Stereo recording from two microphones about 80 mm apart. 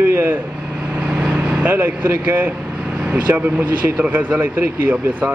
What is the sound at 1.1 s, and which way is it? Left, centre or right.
Vehicle, centre.